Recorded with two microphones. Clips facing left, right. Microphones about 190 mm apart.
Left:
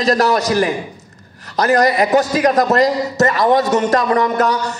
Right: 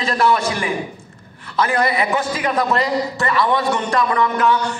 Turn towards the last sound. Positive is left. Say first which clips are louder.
# left 2 dB
turn(degrees=40)  # may be behind; listen again after turning